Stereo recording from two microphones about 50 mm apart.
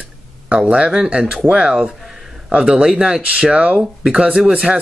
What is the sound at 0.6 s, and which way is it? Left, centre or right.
Speech, centre.